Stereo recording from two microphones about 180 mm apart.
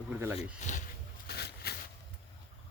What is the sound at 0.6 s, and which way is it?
Speech, 45° left (ahead or behind).